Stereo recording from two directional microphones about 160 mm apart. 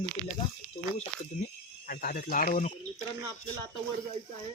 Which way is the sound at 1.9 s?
65° left (ahead or behind).